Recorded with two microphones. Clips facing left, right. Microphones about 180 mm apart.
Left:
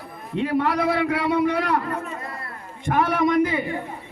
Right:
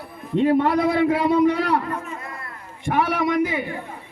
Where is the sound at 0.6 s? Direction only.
20° right (ahead or behind).